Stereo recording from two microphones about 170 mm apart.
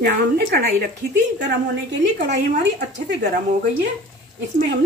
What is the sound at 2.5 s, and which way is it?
Speech, 90° right.